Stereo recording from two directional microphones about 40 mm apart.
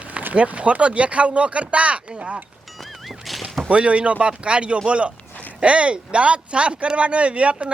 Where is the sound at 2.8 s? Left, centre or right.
Centre.